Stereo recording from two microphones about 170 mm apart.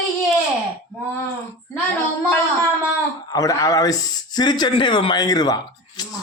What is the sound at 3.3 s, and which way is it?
Speech, 20° left (ahead or behind).